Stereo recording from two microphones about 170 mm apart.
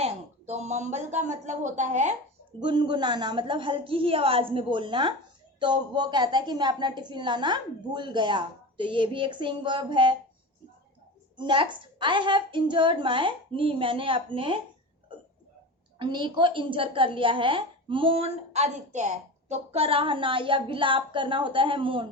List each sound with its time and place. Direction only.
0.0 s speech: 40° right (ahead or behind)
2.6 s a woman's voice: 30° right (ahead or behind)
11.3 s a woman's voice: 30° right (ahead or behind)
16.0 s a woman's voice: 30° right (ahead or behind)